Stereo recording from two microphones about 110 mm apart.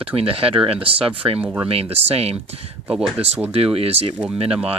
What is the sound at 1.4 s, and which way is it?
Speech, 10° right (ahead or behind).